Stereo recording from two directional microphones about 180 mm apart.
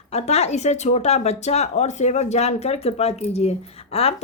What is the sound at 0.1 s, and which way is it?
Speech, 35° left (ahead or behind).